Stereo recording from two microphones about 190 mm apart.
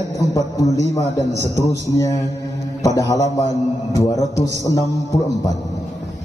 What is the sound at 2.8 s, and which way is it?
A man's voice, 15° left (ahead or behind).